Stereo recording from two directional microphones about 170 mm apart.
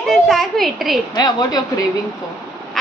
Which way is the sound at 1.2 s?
25° left (ahead or behind).